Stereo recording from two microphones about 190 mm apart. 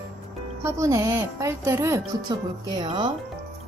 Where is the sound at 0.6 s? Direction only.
15° right (ahead or behind).